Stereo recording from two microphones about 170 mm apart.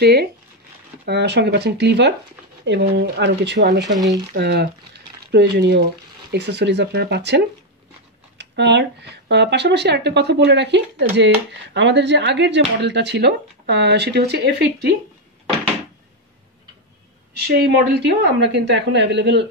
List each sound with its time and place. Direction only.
0.0 s speech: 70° right (ahead or behind)
1.0 s a woman's voice: 85° right
4.4 s speech: 75° right (ahead or behind)
17.5 s a woman's voice: 75° right (ahead or behind); by 19.4 s 90° right